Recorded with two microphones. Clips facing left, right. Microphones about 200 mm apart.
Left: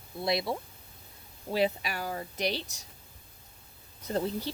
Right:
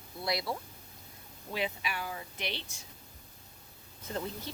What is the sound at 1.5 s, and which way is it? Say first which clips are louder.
Speech: left 7 dB; 40° left (ahead or behind).